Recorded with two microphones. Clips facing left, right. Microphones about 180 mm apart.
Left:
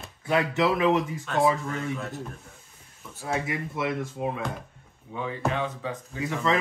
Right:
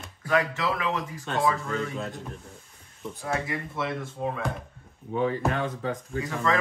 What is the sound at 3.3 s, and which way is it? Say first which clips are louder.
Speech: left 1 dB; 20° left (ahead or behind).